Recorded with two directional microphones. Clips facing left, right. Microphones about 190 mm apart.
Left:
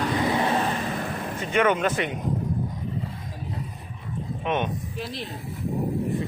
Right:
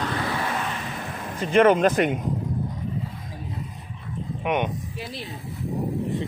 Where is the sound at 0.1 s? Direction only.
20° left (ahead or behind); by 0.8 s 35° left (ahead or behind).